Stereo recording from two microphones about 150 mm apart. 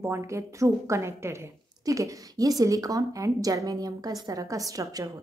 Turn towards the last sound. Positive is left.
turn(degrees=-20)  # may be behind; listen again after turning